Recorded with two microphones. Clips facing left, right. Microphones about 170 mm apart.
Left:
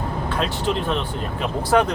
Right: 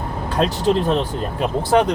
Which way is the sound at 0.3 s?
40° right (ahead or behind).